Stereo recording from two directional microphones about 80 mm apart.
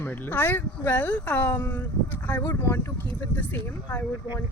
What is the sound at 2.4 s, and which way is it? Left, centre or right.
Speech, left.